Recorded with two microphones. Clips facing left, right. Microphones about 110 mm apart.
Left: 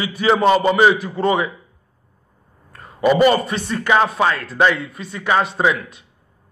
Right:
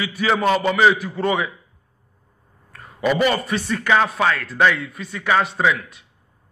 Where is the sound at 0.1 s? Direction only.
25° left (ahead or behind).